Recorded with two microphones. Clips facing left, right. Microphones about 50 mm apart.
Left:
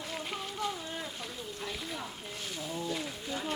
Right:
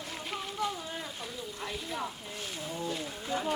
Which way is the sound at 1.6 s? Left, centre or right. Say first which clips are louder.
Right 3 dB; centre.